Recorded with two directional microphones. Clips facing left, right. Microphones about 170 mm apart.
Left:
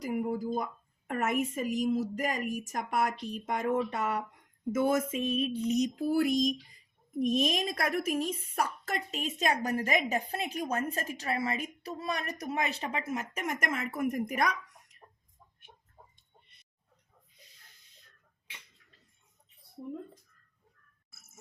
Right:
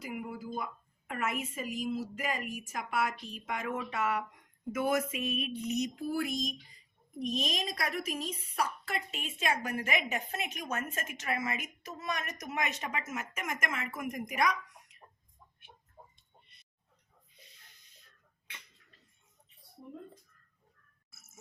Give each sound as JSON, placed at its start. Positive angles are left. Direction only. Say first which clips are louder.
{"t": 0.0, "sound": "a woman's voice", "louder": "left 8 dB", "side_deg": 40}
{"t": 5.2, "sound": "a woman's voice", "louder": "left 5 dB", "side_deg": 30}
{"t": 7.2, "sound": "a woman's voice", "louder": "left 6 dB", "side_deg": 50}